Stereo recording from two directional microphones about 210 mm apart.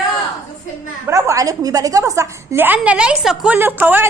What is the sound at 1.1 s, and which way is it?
A woman's voice, 15° right (ahead or behind).